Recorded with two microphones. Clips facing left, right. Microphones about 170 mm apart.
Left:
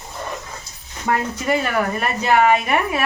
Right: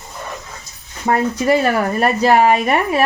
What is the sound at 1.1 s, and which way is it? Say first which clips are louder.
Speech: right 5 dB; 40° right (ahead or behind).